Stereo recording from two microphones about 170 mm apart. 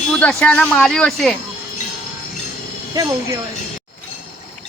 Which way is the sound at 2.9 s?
20° right (ahead or behind).